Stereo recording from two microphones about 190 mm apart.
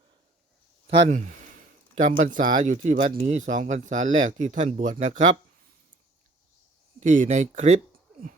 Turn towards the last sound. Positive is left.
turn(degrees=-40)  # may be behind; listen again after turning